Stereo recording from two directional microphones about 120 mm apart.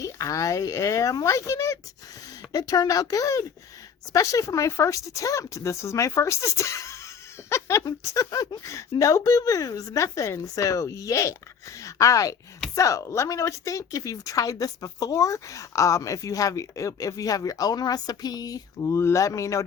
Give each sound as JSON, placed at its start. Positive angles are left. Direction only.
{"t": 0.0, "sound": "speech", "side_deg": 25}